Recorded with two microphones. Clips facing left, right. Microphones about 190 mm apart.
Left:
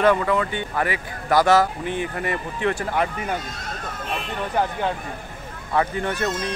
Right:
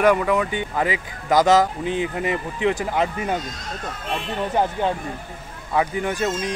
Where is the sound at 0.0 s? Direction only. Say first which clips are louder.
Right 1 dB; 15° right (ahead or behind).